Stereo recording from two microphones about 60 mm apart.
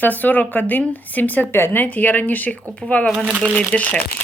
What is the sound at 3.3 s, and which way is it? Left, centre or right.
Speech, right.